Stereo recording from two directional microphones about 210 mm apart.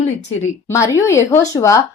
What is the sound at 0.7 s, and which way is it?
Speech, 15° left (ahead or behind).